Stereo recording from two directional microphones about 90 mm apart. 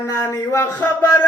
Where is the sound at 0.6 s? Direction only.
20° left (ahead or behind).